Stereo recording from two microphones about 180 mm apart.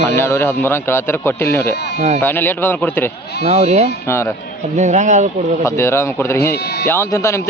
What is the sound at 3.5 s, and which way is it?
Speech, 35° right (ahead or behind).